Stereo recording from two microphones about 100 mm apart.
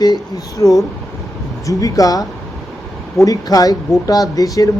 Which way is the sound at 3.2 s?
40° left (ahead or behind).